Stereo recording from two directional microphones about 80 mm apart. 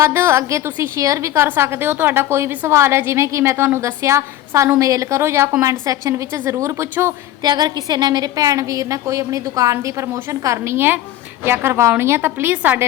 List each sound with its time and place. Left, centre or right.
0.0 s a woman's voice: right
7.4 s a woman's voice: right